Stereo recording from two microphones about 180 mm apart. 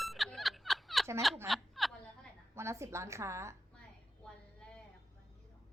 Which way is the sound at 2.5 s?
15° right (ahead or behind).